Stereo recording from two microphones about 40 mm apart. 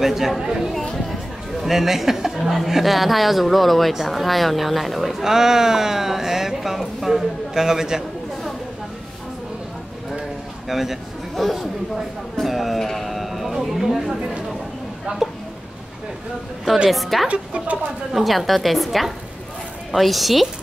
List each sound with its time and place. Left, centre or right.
0.0 s a man's voice: centre
5.2 s speech: centre
10.7 s speech: centre
12.8 s sheep: centre
15.1 s speech: right
16.9 s speech: centre
17.3 s speech: right
18.1 s speech: centre